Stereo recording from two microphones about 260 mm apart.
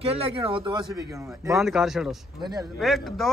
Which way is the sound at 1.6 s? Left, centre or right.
Centre.